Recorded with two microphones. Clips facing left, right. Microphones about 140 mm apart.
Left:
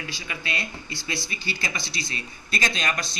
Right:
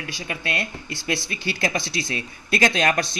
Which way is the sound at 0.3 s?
65° right (ahead or behind).